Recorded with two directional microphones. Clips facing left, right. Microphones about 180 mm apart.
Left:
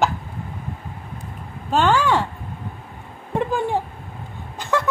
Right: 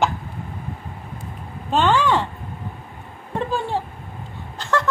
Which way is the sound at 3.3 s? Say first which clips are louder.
Left 2 dB; 15° left (ahead or behind).